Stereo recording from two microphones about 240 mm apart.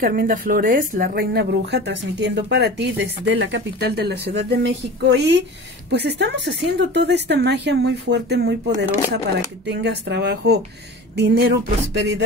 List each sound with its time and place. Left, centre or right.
0.0 s speech: right
9.7 s speech: right